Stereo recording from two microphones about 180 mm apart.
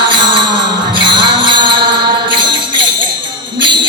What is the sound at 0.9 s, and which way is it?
Music, 25° right (ahead or behind).